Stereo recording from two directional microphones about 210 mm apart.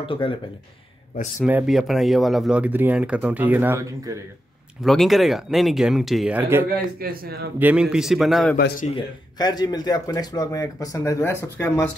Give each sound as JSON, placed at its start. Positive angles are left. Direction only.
{"t": 0.0, "sound": "a man's voice", "side_deg": 25}
{"t": 1.4, "sound": "speech", "side_deg": -5}
{"t": 4.8, "sound": "speech", "side_deg": 0}
{"t": 7.0, "sound": "a man's voice", "side_deg": -45}
{"t": 7.5, "sound": "speech", "side_deg": -5}
{"t": 8.5, "sound": "speech", "side_deg": 45}
{"t": 8.8, "sound": "speech", "side_deg": 20}